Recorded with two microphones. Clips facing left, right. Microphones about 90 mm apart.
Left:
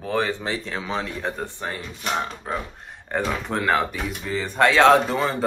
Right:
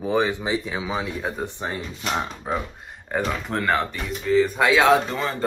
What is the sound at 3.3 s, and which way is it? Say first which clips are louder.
Speech: left 2 dB; centre (ahead or behind).